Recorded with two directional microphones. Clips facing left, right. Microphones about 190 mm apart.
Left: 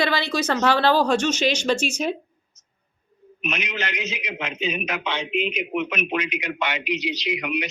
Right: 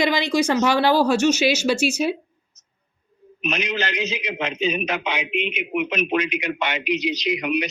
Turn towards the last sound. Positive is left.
turn(degrees=-40)  # may be behind; listen again after turning